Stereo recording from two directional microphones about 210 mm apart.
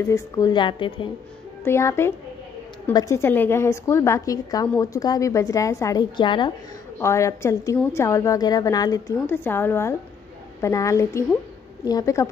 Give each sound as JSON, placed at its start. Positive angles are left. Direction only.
{"t": 0.1, "sound": "a woman's voice", "side_deg": 20}
{"t": 1.6, "sound": "a woman's voice", "side_deg": 10}